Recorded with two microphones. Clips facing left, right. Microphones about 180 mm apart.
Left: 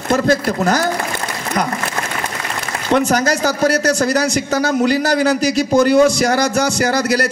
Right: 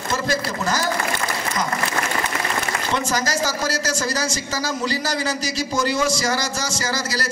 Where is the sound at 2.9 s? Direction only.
60° left (ahead or behind).